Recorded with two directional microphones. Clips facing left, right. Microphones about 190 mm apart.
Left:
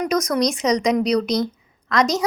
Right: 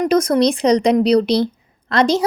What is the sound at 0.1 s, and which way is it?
A woman's voice, 30° right (ahead or behind).